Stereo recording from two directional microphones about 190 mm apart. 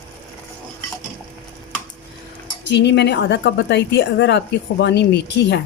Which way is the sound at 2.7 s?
65° left (ahead or behind).